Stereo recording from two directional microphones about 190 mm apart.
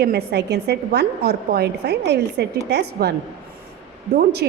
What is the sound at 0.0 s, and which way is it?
A woman's voice, 60° right (ahead or behind).